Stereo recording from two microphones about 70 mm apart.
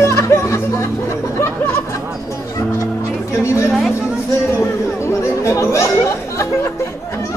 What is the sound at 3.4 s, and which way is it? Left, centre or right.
Chatter, left.